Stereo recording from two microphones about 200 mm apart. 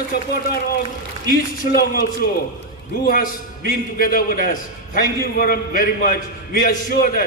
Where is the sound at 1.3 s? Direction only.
50° left (ahead or behind).